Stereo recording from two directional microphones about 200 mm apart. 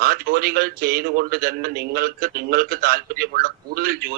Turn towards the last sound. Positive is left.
turn(degrees=-45)  # may be behind; listen again after turning